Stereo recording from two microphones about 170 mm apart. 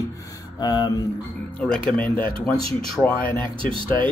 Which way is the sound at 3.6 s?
30° right (ahead or behind).